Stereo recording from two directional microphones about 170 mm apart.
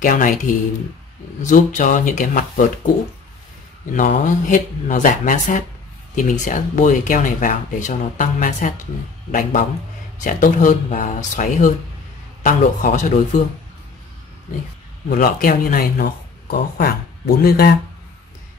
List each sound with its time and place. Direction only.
0.0 s speech: 50° left (ahead or behind)
3.9 s speech: 50° left (ahead or behind)
15.0 s speech: 55° left (ahead or behind)